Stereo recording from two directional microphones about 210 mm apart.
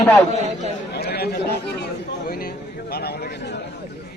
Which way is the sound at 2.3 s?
45° left (ahead or behind).